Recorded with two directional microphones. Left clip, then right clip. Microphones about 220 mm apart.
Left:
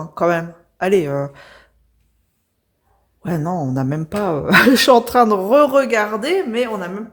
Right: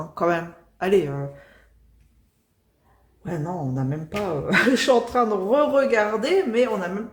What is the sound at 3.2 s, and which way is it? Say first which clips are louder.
A woman's voice: left 7 dB; 50° left (ahead or behind).